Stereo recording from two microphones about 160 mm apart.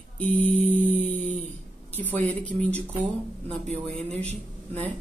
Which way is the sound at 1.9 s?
10° left (ahead or behind).